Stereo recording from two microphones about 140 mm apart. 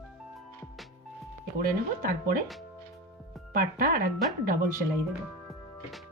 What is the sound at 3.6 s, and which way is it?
Speech, 90° right.